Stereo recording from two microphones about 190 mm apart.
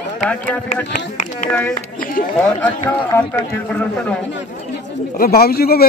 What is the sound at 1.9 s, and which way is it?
Chatter, 45° left (ahead or behind).